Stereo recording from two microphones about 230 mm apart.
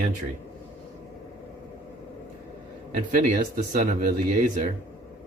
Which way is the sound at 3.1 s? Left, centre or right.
Right.